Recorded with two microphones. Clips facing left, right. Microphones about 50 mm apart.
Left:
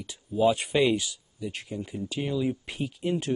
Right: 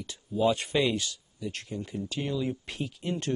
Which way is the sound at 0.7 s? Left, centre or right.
Centre.